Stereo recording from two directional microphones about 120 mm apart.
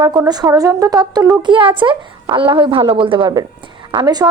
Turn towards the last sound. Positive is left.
turn(degrees=-35)  # may be behind; listen again after turning